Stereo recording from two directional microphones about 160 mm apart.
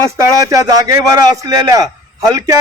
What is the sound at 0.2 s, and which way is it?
Speech, 20° right (ahead or behind).